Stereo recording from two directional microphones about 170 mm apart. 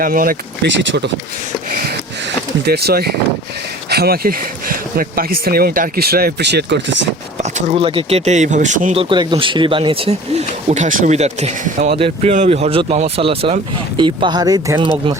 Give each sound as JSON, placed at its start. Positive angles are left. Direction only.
{"t": 0.0, "sound": "speech", "side_deg": -55}
{"t": 2.6, "sound": "speech", "side_deg": -70}
{"t": 7.3, "sound": "speech", "side_deg": -35}
{"t": 9.0, "sound": "speech", "side_deg": -25}
{"t": 11.9, "sound": "speech", "side_deg": -35}